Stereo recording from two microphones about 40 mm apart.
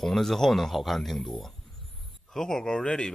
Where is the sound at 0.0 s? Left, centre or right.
Centre.